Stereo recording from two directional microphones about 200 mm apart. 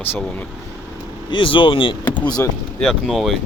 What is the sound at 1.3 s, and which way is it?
Speech, 25° left (ahead or behind).